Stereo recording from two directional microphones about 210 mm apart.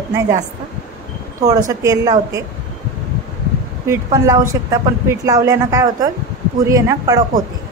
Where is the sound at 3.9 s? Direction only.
15° right (ahead or behind).